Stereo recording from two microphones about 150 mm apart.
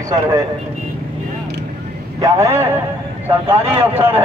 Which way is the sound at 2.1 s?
20° right (ahead or behind).